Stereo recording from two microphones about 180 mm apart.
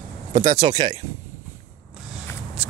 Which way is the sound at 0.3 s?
35° right (ahead or behind).